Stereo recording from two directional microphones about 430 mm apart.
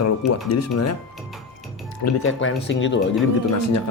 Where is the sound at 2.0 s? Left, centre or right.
Left.